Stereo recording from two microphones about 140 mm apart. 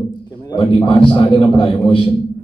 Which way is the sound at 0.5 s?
30° left (ahead or behind).